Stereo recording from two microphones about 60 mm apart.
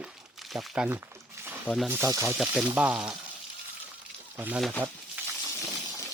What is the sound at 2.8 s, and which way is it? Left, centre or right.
Speech, right.